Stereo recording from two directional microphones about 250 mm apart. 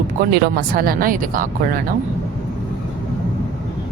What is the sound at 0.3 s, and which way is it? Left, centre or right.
Speech, right.